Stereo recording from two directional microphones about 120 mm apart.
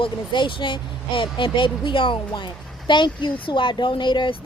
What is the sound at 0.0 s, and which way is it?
Speech, 45° left (ahead or behind).